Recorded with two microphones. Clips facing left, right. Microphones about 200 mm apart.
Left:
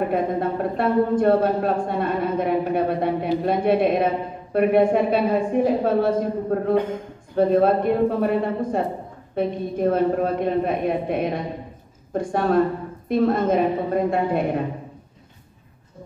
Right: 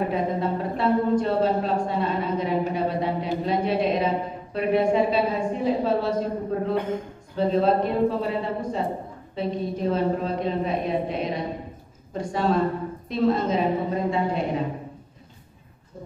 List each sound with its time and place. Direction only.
0.1 s a woman's voice: 55° left (ahead or behind)